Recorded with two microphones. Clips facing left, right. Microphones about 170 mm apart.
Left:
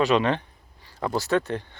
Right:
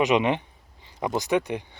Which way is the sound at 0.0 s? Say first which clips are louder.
Even; 20° right (ahead or behind).